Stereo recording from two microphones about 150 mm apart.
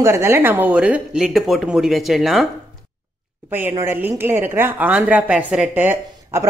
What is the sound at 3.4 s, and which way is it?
A woman's voice, 15° right (ahead or behind).